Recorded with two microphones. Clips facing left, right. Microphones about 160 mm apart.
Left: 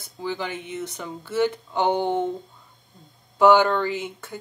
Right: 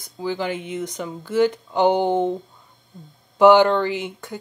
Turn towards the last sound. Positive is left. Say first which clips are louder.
# right 2 dB
turn(degrees=-15)  # may be behind; listen again after turning